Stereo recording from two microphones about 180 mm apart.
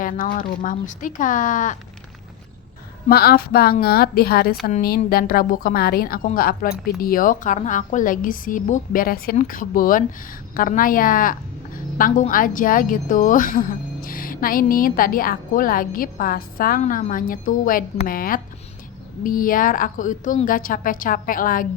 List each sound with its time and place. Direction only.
0.0 s a woman's voice: 50° left (ahead or behind)
3.1 s a woman's voice: 60° left (ahead or behind)